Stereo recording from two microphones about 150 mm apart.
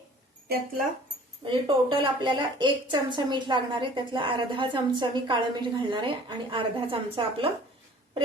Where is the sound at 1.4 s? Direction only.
35° right (ahead or behind).